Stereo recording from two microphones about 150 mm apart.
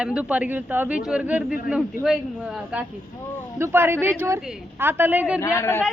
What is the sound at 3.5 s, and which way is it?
Speech, 15° right (ahead or behind).